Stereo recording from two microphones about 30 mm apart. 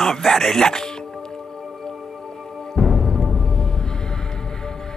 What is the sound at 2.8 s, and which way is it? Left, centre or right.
Music, centre.